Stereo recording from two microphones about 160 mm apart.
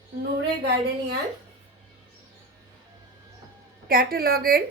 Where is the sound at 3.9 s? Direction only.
65° right (ahead or behind).